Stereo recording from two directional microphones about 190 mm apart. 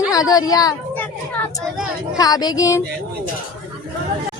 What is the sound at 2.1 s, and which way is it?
Speech, 20° left (ahead or behind).